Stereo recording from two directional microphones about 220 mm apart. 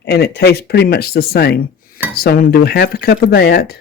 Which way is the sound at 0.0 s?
45° left (ahead or behind).